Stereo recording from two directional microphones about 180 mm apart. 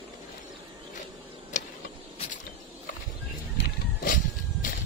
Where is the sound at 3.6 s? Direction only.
55° left (ahead or behind).